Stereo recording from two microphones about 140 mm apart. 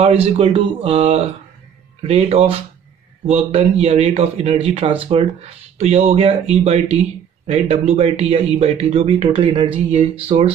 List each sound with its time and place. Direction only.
0.0 s speech: 45° right (ahead or behind)